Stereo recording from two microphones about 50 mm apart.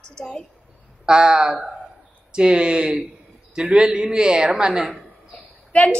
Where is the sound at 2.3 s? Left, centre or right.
Centre.